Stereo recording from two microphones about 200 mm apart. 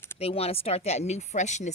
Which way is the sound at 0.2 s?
30° left (ahead or behind).